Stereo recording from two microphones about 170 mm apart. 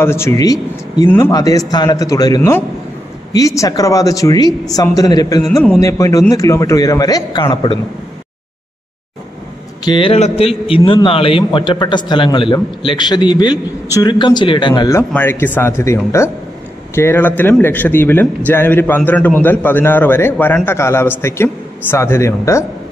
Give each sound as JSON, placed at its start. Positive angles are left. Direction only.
{"t": 0.0, "sound": "a man's voice", "side_deg": 15}
{"t": 9.8, "sound": "a man's voice", "side_deg": 30}